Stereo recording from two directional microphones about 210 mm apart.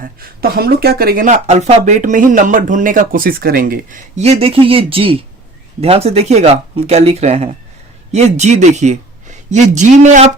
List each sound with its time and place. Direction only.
0.0 s speech: 45° right (ahead or behind)